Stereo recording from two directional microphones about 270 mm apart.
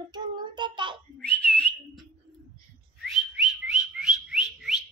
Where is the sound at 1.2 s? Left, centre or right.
Centre.